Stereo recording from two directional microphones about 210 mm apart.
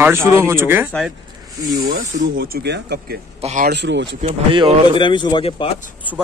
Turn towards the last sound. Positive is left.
turn(degrees=25)  # may be behind; listen again after turning